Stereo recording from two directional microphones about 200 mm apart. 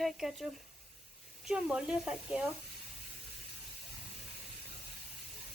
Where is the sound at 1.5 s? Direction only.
5° right (ahead or behind).